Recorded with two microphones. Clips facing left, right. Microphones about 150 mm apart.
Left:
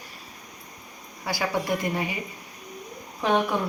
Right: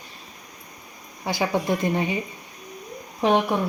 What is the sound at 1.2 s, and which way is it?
Speech, 20° right (ahead or behind).